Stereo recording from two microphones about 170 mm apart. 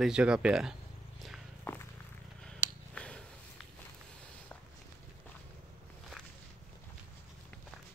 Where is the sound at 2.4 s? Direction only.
5° left (ahead or behind).